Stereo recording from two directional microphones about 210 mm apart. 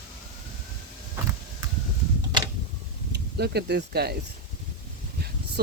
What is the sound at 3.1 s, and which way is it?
Speech, 50° right (ahead or behind).